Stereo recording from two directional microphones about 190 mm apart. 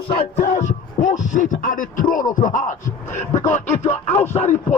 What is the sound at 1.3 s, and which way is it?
A man's voice, 45° left (ahead or behind).